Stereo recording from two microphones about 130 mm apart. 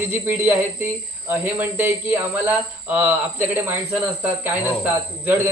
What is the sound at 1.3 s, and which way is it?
Speech, 15° right (ahead or behind).